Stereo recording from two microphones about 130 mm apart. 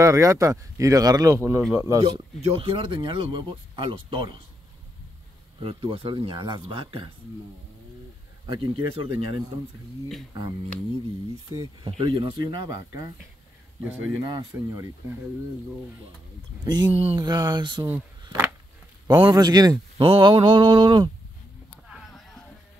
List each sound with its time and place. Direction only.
0.0 s speech: 25° right (ahead or behind)
2.0 s speech: 40° right (ahead or behind)
5.6 s speech: 45° right (ahead or behind)
8.5 s speech: 45° right (ahead or behind)
12.0 s speech: 40° right (ahead or behind)
14.3 s speech: 25° right (ahead or behind)
16.6 s speech: 35° right (ahead or behind)
16.9 s speech: 50° right (ahead or behind)
17.2 s speech: 30° right (ahead or behind)
19.0 s speech: 35° right (ahead or behind)
20.0 s speech: 40° right (ahead or behind)
21.8 s a sound: centre (ahead or behind)